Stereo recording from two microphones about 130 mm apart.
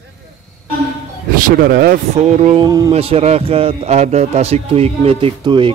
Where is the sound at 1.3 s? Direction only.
90° right.